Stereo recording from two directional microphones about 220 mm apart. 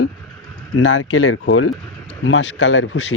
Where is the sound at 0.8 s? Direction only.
65° left (ahead or behind).